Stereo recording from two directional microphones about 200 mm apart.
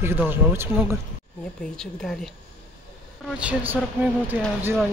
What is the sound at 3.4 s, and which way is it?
Speech, 10° right (ahead or behind).